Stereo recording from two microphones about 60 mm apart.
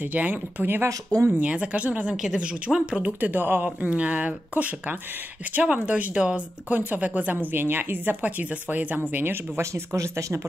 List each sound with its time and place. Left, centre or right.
0.0 s speech: right
1.3 s speech: right
3.9 s speech: centre
9.6 s speech: right